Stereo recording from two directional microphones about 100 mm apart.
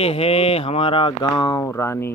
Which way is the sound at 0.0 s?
75° left (ahead or behind).